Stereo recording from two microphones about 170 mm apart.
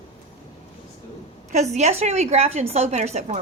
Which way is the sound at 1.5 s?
40° right (ahead or behind).